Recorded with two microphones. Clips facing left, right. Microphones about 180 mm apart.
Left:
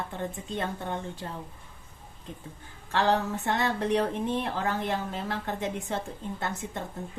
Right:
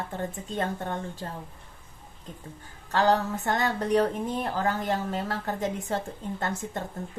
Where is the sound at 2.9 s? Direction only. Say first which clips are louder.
Right 2 dB; 40° right (ahead or behind).